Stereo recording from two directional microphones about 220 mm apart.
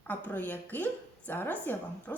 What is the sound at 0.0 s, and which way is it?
A woman's voice, 10° left (ahead or behind).